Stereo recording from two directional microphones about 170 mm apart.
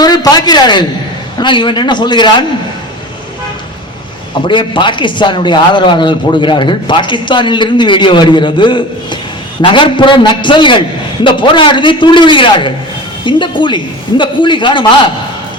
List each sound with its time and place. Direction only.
0.0 s speech: 25° left (ahead or behind)
4.4 s speech: 30° left (ahead or behind)